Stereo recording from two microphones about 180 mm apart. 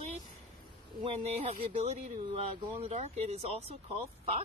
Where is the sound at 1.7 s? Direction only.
35° right (ahead or behind).